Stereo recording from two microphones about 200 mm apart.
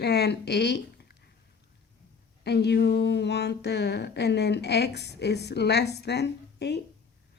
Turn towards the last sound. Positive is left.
turn(degrees=55)  # may be behind; listen again after turning